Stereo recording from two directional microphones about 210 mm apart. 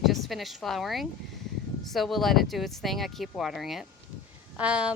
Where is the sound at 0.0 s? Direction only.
Centre (ahead or behind).